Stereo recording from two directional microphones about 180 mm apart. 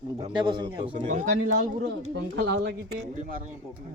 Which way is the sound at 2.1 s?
75° right (ahead or behind).